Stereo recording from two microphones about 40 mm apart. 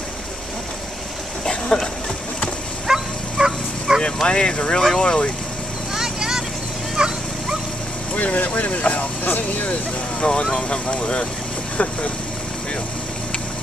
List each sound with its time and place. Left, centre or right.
1.7 s speech: centre
2.9 s dog: centre
4.0 s speech: left
5.9 s vehicle: centre
7.0 s dog: right
8.2 s speech: left
10.2 s speech: centre
11.7 s speech: left